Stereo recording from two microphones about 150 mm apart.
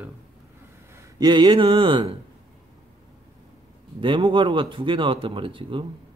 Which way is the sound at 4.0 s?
35° right (ahead or behind).